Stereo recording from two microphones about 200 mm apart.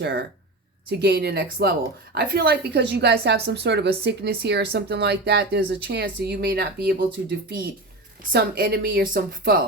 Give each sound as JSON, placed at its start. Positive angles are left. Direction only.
{"t": 0.0, "sound": "a woman's voice", "side_deg": -60}